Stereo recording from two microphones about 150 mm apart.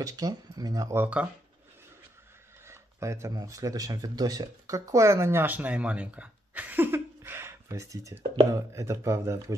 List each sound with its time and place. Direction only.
0.0 s speech: 25° right (ahead or behind)
2.6 s speech: 20° right (ahead or behind)